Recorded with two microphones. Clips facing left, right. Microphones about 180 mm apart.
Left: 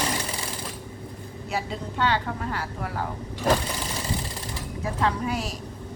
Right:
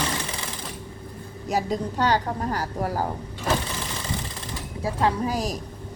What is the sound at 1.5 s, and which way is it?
A woman's voice, 40° right (ahead or behind).